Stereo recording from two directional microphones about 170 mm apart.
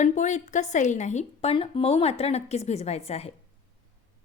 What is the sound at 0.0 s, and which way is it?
A woman's voice, 45° left (ahead or behind).